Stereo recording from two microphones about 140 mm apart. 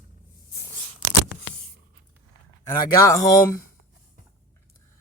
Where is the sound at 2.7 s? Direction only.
25° left (ahead or behind).